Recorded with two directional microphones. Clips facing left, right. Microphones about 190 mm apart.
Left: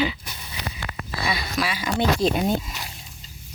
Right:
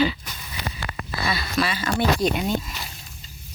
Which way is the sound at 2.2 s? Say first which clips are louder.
Left 1 dB; 30° left (ahead or behind).